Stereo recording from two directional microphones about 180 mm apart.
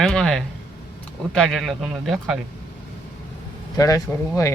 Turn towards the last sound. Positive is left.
turn(degrees=15)  # may be behind; listen again after turning